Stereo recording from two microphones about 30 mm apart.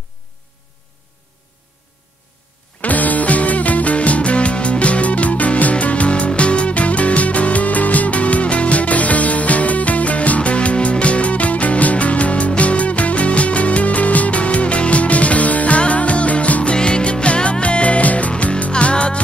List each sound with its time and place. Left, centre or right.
2.8 s music: left
16.7 s music: left
18.7 s music: left